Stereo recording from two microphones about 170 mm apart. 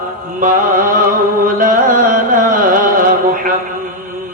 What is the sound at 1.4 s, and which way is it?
Music, 55° right (ahead or behind).